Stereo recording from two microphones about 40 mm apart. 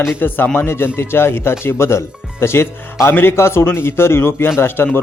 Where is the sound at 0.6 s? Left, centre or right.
Left.